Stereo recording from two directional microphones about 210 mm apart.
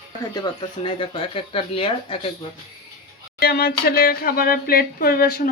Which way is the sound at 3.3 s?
50° left (ahead or behind).